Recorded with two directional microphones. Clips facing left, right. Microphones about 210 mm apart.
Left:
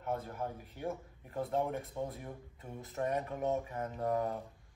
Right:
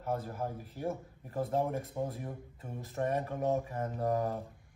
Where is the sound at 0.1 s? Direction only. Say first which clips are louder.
Right 2 dB; 5° right (ahead or behind).